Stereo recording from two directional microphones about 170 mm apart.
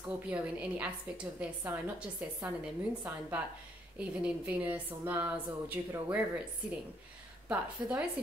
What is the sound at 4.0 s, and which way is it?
A woman's voice, 10° right (ahead or behind).